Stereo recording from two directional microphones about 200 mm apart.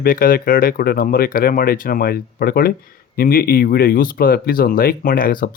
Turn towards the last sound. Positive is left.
turn(degrees=45)  # may be behind; listen again after turning